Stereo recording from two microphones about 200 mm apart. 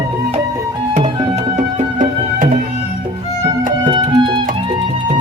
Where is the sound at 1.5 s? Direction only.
35° right (ahead or behind).